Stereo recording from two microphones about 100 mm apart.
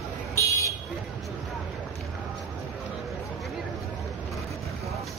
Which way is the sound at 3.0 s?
Centre (ahead or behind).